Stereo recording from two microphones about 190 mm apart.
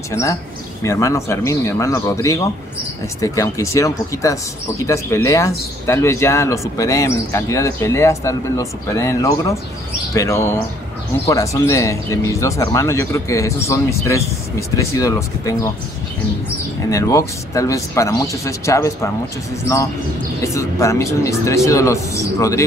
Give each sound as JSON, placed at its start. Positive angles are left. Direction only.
{"t": 0.1, "sound": "speech", "side_deg": 15}
{"t": 16.9, "sound": "speech", "side_deg": 15}
{"t": 20.4, "sound": "speech", "side_deg": 15}